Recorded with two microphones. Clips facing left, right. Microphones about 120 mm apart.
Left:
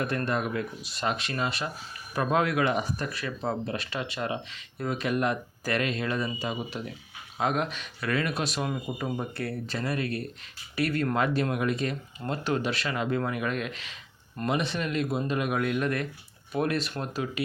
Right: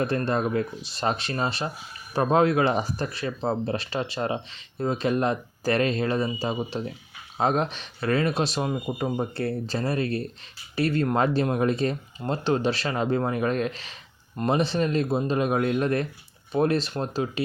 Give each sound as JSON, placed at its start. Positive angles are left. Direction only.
{"t": 0.0, "sound": "speech", "side_deg": -30}